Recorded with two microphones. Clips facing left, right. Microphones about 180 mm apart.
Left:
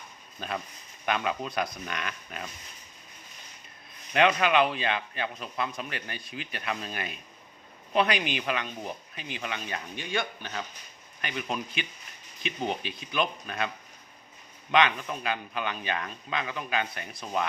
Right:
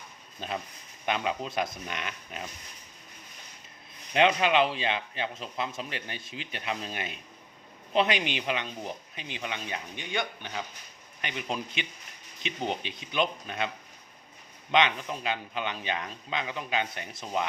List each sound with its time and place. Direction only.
0.3 s speech: 25° right (ahead or behind)
4.1 s speech: 25° right (ahead or behind)
14.7 s speech: 20° right (ahead or behind)